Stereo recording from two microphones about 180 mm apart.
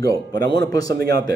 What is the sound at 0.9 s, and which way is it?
Speech, 60° right (ahead or behind).